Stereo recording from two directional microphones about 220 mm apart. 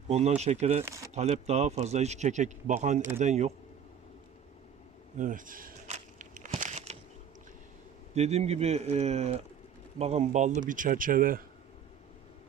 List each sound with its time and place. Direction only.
0.1 s speech: 30° right (ahead or behind)
5.1 s crumpling: 35° right (ahead or behind)
8.1 s speech: 30° right (ahead or behind)